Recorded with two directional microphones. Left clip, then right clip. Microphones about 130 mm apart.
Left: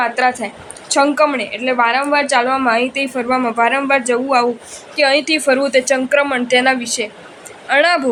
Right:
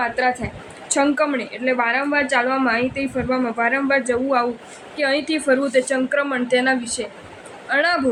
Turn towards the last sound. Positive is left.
turn(degrees=55)  # may be behind; listen again after turning